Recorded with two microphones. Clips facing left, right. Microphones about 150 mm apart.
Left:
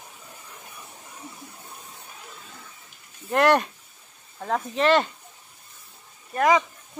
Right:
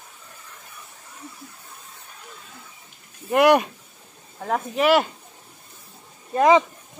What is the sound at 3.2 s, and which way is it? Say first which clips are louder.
Speech: right 3 dB; 10° right (ahead or behind).